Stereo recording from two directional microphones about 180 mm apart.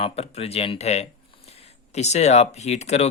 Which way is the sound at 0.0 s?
35° left (ahead or behind).